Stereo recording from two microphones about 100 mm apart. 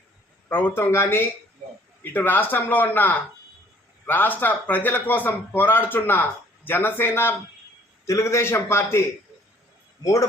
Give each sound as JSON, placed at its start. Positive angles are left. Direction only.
{"t": 0.5, "sound": "a man's voice", "side_deg": 20}